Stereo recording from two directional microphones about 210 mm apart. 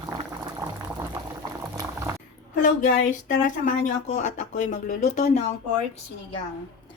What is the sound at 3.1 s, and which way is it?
Speech, 40° left (ahead or behind).